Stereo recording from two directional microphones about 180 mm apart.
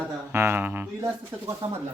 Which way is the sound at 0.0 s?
10° right (ahead or behind).